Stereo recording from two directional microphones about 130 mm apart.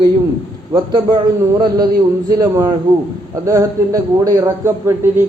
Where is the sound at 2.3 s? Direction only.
30° right (ahead or behind).